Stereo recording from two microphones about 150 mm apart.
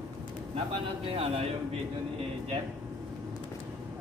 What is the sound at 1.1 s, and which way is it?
Speech, 40° right (ahead or behind).